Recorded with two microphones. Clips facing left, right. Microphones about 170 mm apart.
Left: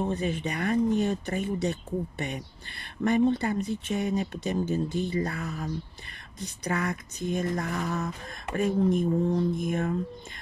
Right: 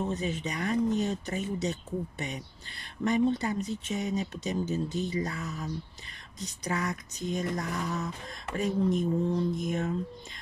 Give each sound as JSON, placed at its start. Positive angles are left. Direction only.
{"t": 0.0, "sound": "speech", "side_deg": 55}